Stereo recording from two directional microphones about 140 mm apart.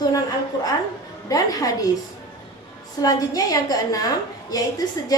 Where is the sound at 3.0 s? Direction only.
25° left (ahead or behind).